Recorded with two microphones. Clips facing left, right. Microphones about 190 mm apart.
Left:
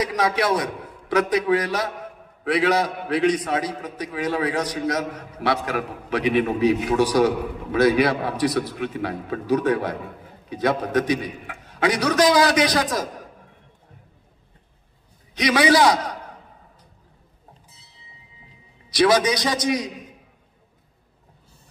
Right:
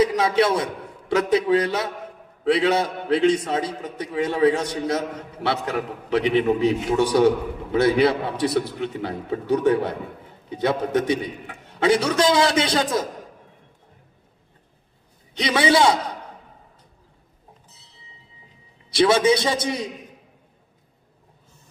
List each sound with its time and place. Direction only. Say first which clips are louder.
0.0 s a man's voice: right 3 dB; 25° right (ahead or behind)
10.6 s a man's voice: even; 25° right (ahead or behind)
15.3 s a man's voice: left 1 dB; 25° right (ahead or behind)
18.9 s a man's voice: right 1 dB; 25° right (ahead or behind)